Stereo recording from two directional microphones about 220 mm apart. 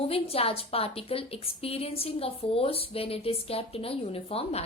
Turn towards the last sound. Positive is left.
turn(degrees=25)  # may be behind; listen again after turning